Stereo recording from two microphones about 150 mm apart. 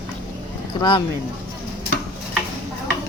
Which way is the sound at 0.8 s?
30° left (ahead or behind).